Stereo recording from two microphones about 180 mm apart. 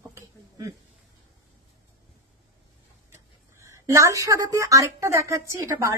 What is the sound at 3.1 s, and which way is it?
Speech, 15° right (ahead or behind).